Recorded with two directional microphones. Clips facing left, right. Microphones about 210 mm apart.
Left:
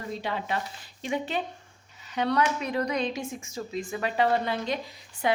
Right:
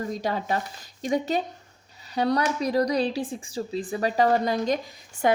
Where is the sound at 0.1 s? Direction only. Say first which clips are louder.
Right 4 dB; 40° right (ahead or behind).